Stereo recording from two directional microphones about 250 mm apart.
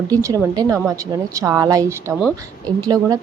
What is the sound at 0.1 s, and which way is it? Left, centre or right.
A woman's voice, centre.